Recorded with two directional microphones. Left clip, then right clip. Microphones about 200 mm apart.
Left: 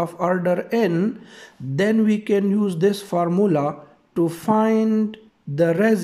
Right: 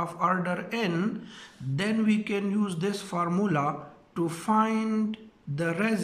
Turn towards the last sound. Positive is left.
turn(degrees=30)  # may be behind; listen again after turning